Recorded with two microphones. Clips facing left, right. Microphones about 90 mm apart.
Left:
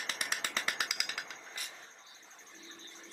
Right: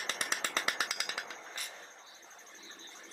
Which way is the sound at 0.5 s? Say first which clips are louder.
Right 2 dB; 25° right (ahead or behind).